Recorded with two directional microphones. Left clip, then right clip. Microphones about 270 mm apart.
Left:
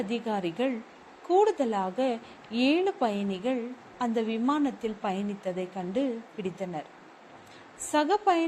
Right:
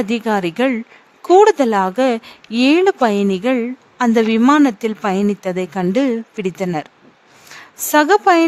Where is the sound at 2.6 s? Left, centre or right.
Right.